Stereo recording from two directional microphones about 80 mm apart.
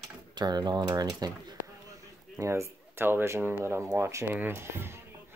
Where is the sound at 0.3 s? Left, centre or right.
Right.